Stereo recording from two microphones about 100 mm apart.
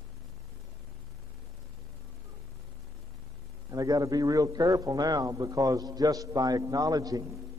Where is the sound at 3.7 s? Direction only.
35° right (ahead or behind).